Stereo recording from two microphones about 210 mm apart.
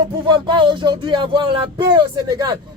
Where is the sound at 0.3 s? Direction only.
20° right (ahead or behind).